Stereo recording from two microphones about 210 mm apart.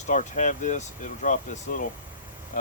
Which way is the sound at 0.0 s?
35° left (ahead or behind).